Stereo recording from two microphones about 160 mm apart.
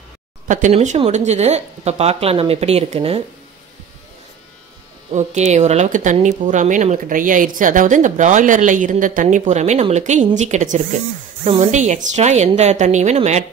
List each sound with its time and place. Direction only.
0.5 s speech: 50° right (ahead or behind)
5.1 s speech: 45° right (ahead or behind)